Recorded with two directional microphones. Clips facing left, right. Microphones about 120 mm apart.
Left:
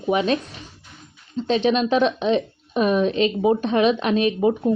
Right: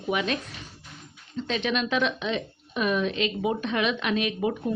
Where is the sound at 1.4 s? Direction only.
35° left (ahead or behind).